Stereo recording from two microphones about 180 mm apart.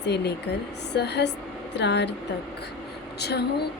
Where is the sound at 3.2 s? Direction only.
65° left (ahead or behind).